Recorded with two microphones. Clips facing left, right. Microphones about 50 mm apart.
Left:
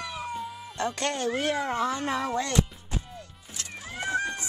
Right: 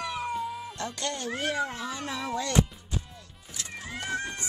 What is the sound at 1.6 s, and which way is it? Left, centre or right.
Speech, left.